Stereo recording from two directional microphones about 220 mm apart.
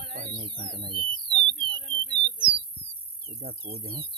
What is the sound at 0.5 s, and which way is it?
Speech, 45° right (ahead or behind).